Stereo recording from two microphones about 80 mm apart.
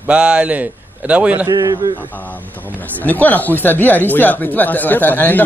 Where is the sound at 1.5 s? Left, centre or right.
Right.